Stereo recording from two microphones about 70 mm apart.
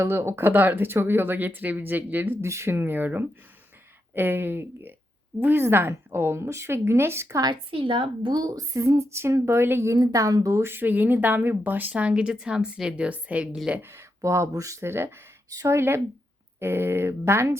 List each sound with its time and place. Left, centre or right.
0.0 s speech: right
2.4 s a woman's voice: right
7.3 s a woman's voice: right
10.0 s speech: right
10.6 s speech: right
14.2 s speech: right
14.8 s a woman's voice: right
15.4 s a woman's voice: right